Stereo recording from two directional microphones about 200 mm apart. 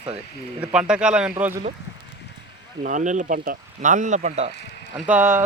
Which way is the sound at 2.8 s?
40° right (ahead or behind).